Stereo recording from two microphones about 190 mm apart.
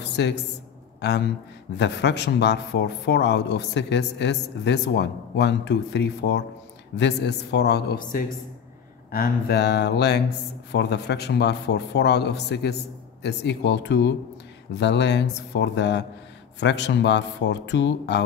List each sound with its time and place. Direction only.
0.2 s speech: 65° left (ahead or behind)